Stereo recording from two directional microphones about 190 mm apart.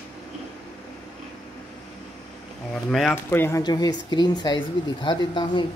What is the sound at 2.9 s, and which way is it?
Speech, 10° left (ahead or behind).